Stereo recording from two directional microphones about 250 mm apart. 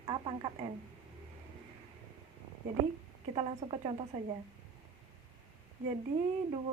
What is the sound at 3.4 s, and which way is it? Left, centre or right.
Speech, right.